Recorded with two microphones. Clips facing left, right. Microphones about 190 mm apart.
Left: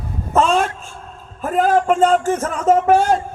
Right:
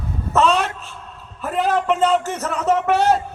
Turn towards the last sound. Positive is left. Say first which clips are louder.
# left 3 dB
turn(degrees=50)  # may be behind; listen again after turning